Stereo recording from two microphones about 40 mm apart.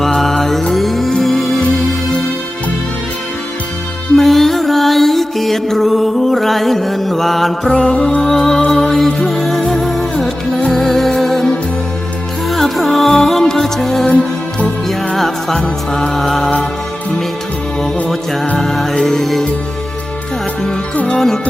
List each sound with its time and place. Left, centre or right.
0.2 s music: centre
4.2 s music: centre
7.7 s music: left
12.5 s music: centre
18.5 s music: centre
21.1 s music: centre